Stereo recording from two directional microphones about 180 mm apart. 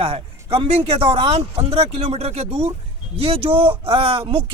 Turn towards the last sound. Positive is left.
turn(degrees=-30)  # may be behind; listen again after turning